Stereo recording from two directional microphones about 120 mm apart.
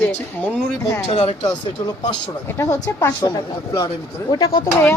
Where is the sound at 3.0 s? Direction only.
30° left (ahead or behind).